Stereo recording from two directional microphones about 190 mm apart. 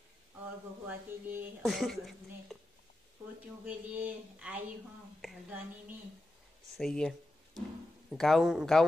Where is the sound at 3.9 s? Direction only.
10° right (ahead or behind).